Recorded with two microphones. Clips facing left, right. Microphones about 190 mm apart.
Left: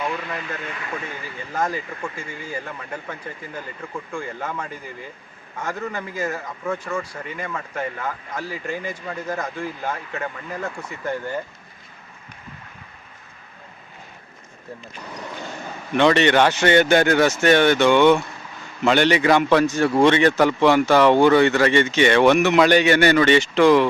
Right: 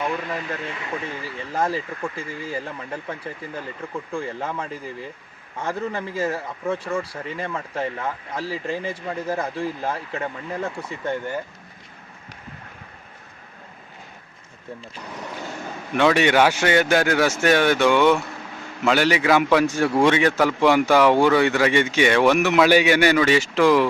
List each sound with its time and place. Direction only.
1.2 s speech: 30° right (ahead or behind)
16.0 s a man's voice: 5° right (ahead or behind)